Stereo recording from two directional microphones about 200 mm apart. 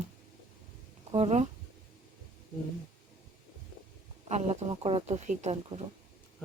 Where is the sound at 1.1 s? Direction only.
30° right (ahead or behind).